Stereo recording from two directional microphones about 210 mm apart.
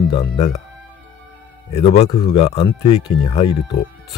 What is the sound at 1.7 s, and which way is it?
Speech, 30° left (ahead or behind).